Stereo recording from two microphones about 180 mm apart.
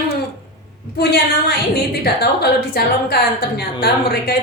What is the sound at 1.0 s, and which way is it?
A woman's voice, 60° left (ahead or behind).